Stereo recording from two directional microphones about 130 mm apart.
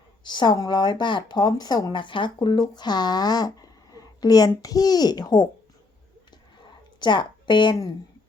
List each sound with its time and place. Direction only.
0.3 s speech: 35° left (ahead or behind)
7.0 s a woman's voice: 35° left (ahead or behind)